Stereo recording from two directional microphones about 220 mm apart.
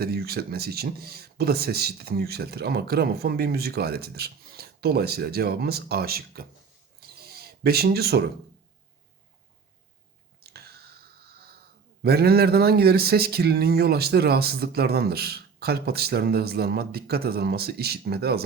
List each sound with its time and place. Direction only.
0.0 s speech: 45° right (ahead or behind)
7.2 s a sound: 45° right (ahead or behind)
12.0 s speech: 45° right (ahead or behind)